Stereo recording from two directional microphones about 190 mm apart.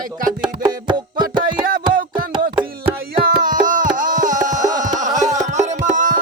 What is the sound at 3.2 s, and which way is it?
Music, 45° right (ahead or behind).